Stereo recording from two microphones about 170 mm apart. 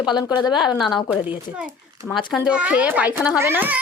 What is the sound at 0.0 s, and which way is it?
Speech, 25° left (ahead or behind).